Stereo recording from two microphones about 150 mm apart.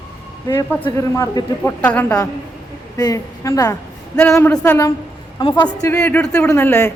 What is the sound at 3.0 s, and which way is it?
A woman's voice, 25° left (ahead or behind).